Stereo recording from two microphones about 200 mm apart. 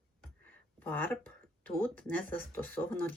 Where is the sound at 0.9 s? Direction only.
5° left (ahead or behind).